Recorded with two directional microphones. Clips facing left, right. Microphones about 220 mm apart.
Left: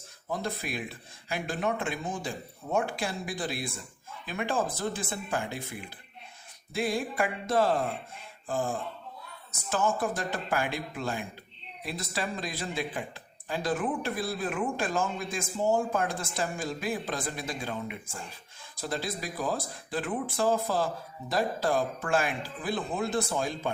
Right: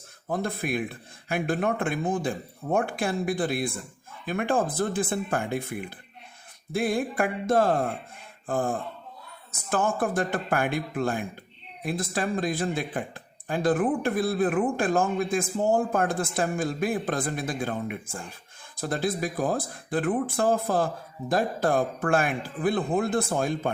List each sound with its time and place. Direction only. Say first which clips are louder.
0.3 s speech: right 5 dB; 55° right (ahead or behind)